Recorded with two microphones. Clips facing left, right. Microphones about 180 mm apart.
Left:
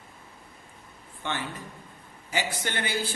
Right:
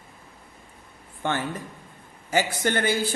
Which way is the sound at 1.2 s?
50° right (ahead or behind).